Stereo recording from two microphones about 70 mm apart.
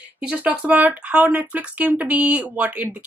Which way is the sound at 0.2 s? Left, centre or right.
Centre.